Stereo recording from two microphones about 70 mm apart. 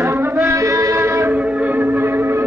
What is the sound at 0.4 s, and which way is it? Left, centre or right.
Music, right.